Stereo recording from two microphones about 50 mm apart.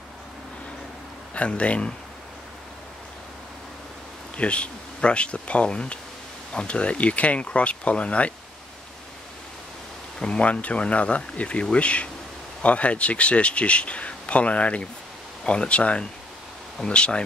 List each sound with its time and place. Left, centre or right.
1.3 s speech: left
4.4 s speech: left
10.1 s speech: centre